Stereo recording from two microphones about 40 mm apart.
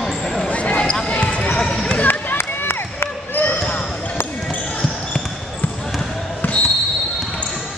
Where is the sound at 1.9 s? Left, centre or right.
Left.